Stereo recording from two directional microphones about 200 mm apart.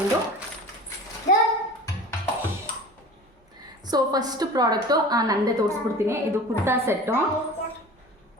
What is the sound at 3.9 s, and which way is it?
A woman's voice, 20° right (ahead or behind).